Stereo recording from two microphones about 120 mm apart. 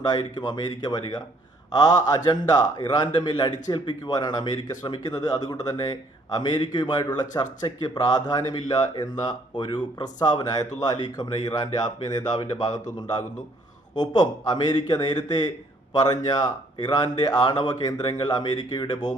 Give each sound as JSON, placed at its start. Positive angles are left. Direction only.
{"t": 0.0, "sound": "speech", "side_deg": 35}